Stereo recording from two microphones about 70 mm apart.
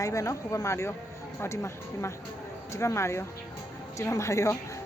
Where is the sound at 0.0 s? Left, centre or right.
Left.